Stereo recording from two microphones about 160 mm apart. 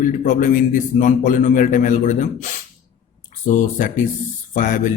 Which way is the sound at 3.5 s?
50° left (ahead or behind).